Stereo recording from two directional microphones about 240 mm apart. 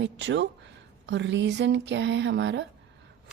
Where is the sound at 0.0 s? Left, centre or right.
Right.